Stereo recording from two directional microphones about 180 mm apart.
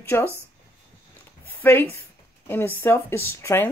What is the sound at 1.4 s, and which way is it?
Speech, 10° left (ahead or behind).